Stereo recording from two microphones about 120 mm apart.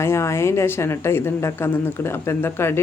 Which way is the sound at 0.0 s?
20° left (ahead or behind).